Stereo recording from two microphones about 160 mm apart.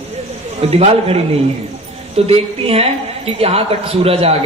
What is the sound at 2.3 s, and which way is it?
A woman's voice, 40° right (ahead or behind).